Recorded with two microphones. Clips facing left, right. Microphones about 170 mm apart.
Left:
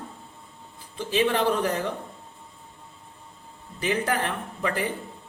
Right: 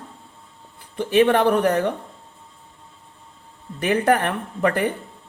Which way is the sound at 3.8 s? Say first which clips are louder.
Right 7 dB; 60° right (ahead or behind).